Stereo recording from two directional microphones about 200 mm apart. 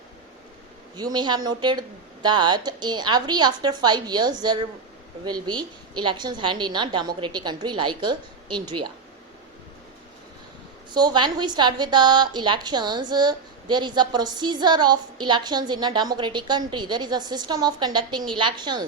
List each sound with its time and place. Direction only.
0.9 s a woman's voice: 20° right (ahead or behind)
10.9 s a woman's voice: 20° right (ahead or behind)